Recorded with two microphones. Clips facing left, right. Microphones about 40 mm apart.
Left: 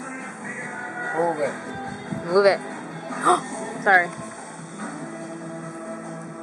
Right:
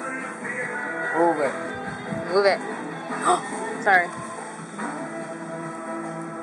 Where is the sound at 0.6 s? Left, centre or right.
Centre.